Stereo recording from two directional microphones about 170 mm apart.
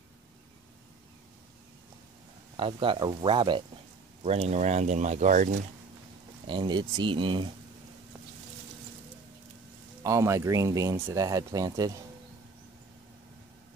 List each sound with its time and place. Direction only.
2.5 s speech: 30° right (ahead or behind); by 5.6 s 45° right (ahead or behind)
6.4 s speech: 30° right (ahead or behind)
10.0 s speech: 15° right (ahead or behind)